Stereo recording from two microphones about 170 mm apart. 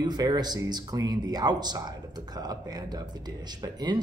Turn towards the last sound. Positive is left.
turn(degrees=-25)  # may be behind; listen again after turning